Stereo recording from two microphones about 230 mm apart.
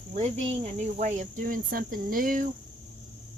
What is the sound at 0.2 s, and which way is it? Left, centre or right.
Speech, right.